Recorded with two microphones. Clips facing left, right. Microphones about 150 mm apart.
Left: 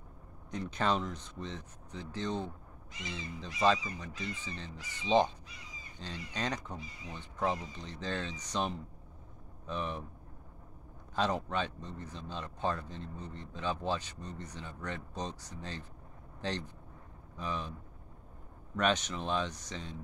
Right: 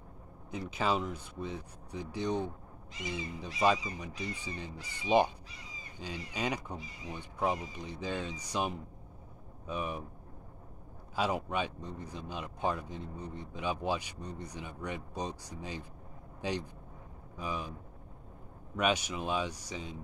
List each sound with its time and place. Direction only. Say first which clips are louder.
0.5 s speech: even; 5° right (ahead or behind)
11.1 s speech: even; 10° right (ahead or behind)
18.8 s speech: even; 10° right (ahead or behind)